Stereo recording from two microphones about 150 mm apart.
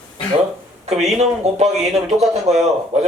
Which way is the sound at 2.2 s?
45° right (ahead or behind).